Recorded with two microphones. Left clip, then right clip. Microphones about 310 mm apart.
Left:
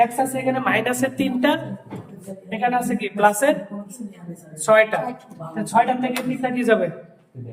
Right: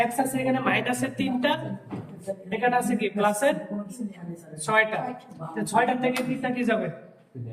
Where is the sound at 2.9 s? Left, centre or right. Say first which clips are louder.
Left 6 dB; centre.